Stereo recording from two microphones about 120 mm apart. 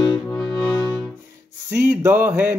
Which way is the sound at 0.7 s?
25° left (ahead or behind).